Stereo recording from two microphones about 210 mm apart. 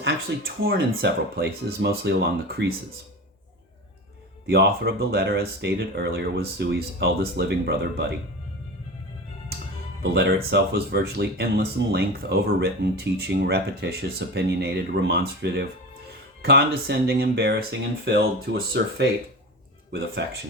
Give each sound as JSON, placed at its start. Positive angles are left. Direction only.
{"t": 0.0, "sound": "speech", "side_deg": -45}
{"t": 4.4, "sound": "speech", "side_deg": -50}
{"t": 10.0, "sound": "speech", "side_deg": -50}